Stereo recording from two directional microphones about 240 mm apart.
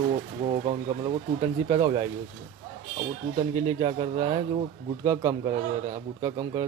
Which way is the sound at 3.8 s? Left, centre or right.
Right.